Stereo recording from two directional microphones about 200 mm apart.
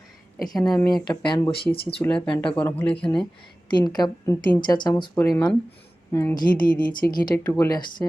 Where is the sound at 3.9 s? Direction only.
20° left (ahead or behind).